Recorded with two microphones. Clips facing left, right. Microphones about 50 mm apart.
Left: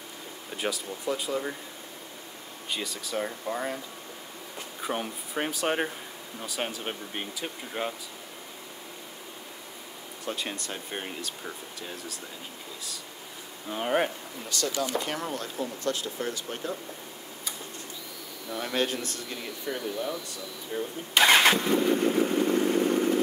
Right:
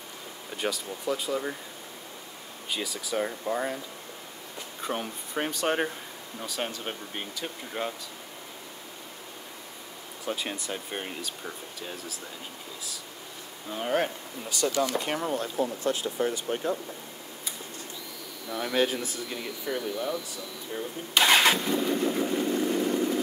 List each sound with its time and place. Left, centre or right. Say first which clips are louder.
0.6 s speech: even; centre
2.7 s speech: right 1 dB; centre
4.8 s speech: left 1 dB; centre
10.2 s speech: right 1 dB; centre
13.7 s speech: left 1 dB; centre
14.5 s speech: right 3 dB; centre
15.0 s speech: right 3 dB; centre
15.5 s speech: right 3 dB; centre
18.5 s speech: right 2 dB; centre
21.2 s vehicle: left 1 dB; left